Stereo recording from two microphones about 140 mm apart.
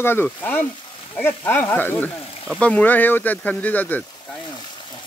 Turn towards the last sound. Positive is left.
turn(degrees=10)  # may be behind; listen again after turning